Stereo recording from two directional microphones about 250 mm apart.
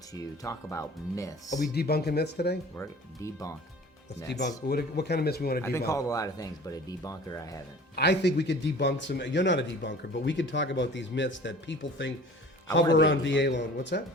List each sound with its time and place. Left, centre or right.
0.1 s speech: centre
1.7 s speech: left
2.7 s speech: centre
4.3 s speech: left
5.9 s speech: centre
7.9 s speech: left